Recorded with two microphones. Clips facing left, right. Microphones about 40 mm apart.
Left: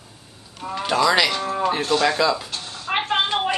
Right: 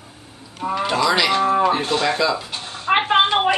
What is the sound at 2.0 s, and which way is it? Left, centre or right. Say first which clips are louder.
Speech: left 1 dB; centre.